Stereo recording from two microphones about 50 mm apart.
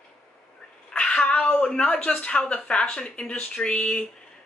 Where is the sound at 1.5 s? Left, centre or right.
Left.